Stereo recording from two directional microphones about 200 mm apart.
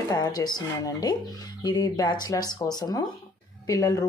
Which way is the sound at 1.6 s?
20° left (ahead or behind).